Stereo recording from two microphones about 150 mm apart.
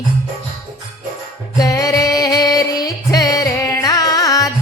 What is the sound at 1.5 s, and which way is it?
Music, 25° left (ahead or behind).